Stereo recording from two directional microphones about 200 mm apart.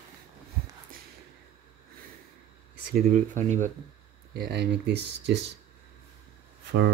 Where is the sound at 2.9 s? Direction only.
45° right (ahead or behind).